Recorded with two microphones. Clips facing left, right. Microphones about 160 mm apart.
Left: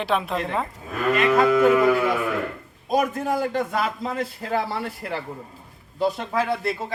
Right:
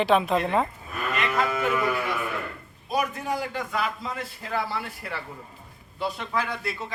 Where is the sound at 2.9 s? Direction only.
45° left (ahead or behind).